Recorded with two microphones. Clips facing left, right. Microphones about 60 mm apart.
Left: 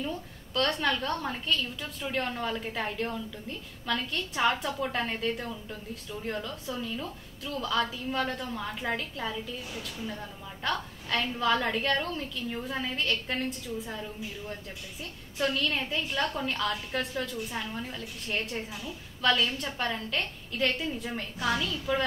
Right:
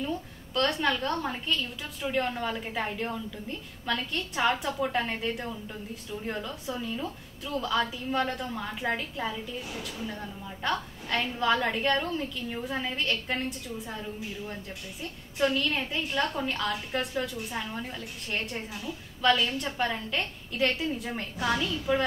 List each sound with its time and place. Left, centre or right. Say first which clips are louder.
0.0 s a woman's voice: right 2 dB; centre
15.3 s a woman's voice: right 2 dB; centre